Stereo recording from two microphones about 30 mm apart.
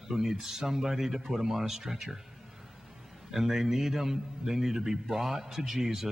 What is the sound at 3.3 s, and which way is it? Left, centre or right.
Speech, centre.